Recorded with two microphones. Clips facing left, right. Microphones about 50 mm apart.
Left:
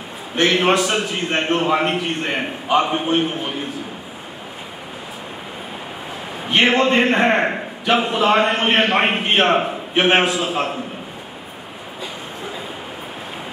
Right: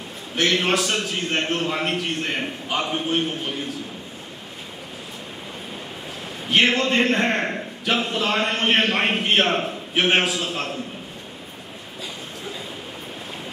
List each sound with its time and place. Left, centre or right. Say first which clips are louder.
0.4 s a man's voice: left 5 dB; centre
6.4 s a man's voice: left 3 dB; centre